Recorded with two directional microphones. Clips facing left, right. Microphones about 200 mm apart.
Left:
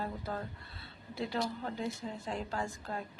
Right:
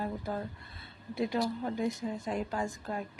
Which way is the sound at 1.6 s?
15° right (ahead or behind).